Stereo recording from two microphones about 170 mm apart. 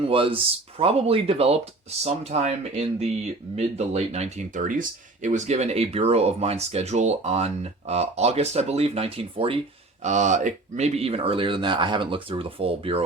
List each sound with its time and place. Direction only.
0.0 s speech: 30° right (ahead or behind)
10.0 s speech: 45° right (ahead or behind)